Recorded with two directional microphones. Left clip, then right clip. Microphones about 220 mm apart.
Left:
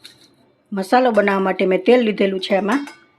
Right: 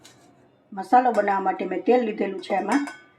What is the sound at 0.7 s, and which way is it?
Speech, 40° left (ahead or behind).